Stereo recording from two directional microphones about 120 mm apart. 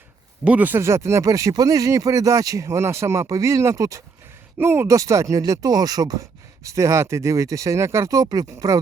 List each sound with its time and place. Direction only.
0.4 s speech: 15° right (ahead or behind); by 8.8 s 30° right (ahead or behind)